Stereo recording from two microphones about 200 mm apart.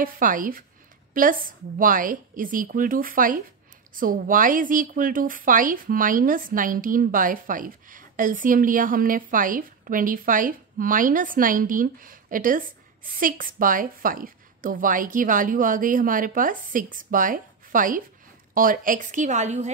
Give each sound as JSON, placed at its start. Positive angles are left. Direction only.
{"t": 0.0, "sound": "a woman's voice", "side_deg": -40}